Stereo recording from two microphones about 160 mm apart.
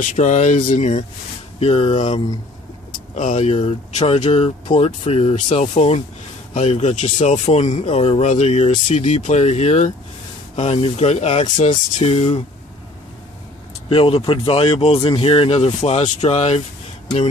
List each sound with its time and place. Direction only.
0.0 s speech: 50° left (ahead or behind); by 2.2 s 35° left (ahead or behind)
3.3 s speech: 40° left (ahead or behind)
13.8 s speech: 35° left (ahead or behind)